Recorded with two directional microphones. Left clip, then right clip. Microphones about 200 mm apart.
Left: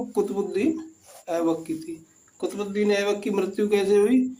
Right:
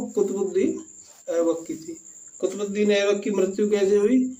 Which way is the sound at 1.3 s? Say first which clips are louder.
Right 2 dB; 25° left (ahead or behind).